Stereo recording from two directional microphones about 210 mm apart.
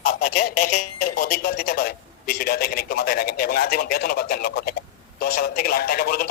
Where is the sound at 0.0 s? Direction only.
45° left (ahead or behind).